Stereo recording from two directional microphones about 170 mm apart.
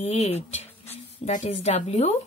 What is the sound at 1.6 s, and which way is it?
Speech, 40° left (ahead or behind).